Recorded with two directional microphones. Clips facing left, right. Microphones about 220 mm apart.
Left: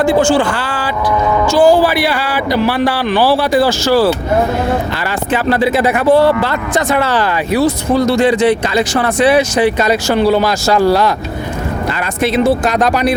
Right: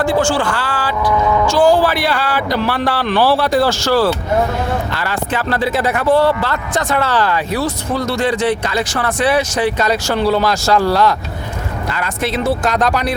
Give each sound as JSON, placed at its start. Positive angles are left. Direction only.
{"t": 0.0, "sound": "speech", "side_deg": 20}
{"t": 1.5, "sound": "speech", "side_deg": 5}
{"t": 5.3, "sound": "speech", "side_deg": 15}
{"t": 12.6, "sound": "speech", "side_deg": 10}